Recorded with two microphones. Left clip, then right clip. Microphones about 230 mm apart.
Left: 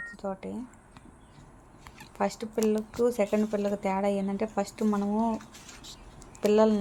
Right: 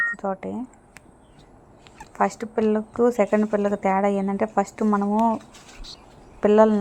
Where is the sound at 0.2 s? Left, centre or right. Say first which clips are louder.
Right 8 dB; centre.